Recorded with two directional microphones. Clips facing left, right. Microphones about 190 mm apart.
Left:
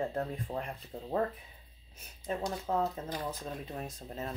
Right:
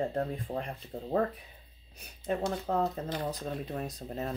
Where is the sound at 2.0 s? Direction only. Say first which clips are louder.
Right 4 dB; 55° right (ahead or behind).